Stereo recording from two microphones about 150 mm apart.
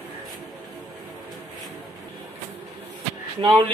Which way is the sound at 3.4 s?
30° right (ahead or behind).